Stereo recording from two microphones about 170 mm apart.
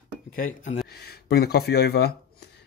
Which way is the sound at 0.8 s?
70° left (ahead or behind).